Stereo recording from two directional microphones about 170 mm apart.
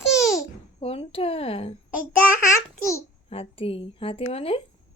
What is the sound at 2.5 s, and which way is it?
Speech, 20° left (ahead or behind).